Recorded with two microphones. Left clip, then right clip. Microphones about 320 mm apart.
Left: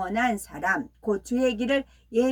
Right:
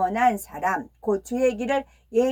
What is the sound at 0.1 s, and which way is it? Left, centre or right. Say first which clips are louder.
A woman's voice: right 5 dB; centre.